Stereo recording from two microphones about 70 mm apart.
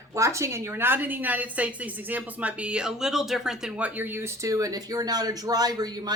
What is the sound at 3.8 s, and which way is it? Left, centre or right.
Speech, right.